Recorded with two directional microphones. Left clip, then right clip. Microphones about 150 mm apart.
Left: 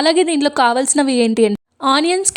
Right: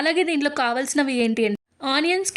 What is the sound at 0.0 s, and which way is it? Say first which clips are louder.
A woman's voice: left 7 dB; 40° left (ahead or behind).